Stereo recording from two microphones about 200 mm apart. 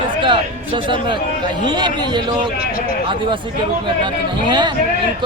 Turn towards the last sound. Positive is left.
turn(degrees=-20)  # may be behind; listen again after turning